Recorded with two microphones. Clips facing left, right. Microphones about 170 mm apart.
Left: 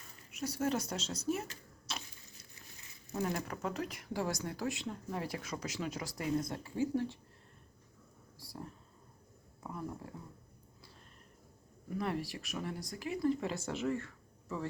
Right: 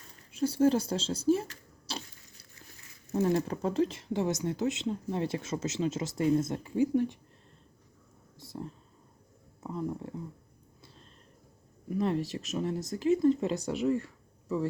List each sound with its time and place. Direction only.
0.3 s speech: 30° right (ahead or behind)
1.9 s a sound: 30° right (ahead or behind)
3.1 s speech: 25° right (ahead or behind)
8.4 s a sound: 20° right (ahead or behind)
9.6 s speech: 20° right (ahead or behind)
11.9 s speech: 20° right (ahead or behind)